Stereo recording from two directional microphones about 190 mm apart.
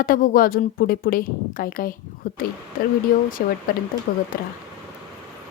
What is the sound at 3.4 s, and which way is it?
Speech, 50° left (ahead or behind).